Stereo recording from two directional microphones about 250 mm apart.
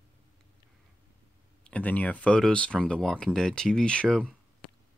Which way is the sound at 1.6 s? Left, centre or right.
Centre.